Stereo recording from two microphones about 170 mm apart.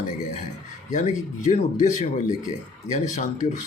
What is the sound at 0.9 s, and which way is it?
Speech, 45° left (ahead or behind).